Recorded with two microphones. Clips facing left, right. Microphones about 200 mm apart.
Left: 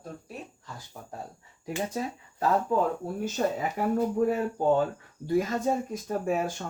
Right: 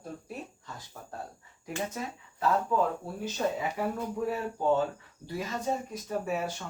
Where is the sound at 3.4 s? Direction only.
45° left (ahead or behind).